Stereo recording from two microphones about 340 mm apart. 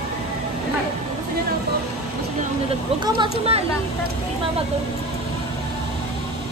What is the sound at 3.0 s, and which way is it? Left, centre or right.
Speech, centre.